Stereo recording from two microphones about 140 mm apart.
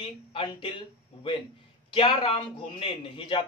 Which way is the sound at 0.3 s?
40° left (ahead or behind).